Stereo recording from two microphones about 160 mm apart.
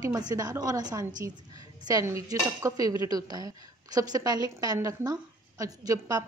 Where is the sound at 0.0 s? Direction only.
25° right (ahead or behind).